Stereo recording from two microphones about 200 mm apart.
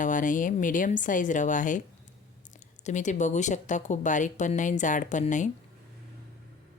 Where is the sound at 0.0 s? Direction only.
40° left (ahead or behind).